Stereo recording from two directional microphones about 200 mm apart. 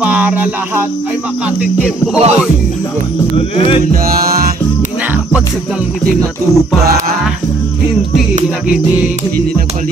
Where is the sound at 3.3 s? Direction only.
30° left (ahead or behind).